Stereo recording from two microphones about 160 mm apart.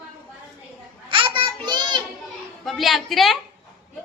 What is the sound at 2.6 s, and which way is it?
Speech, centre (ahead or behind).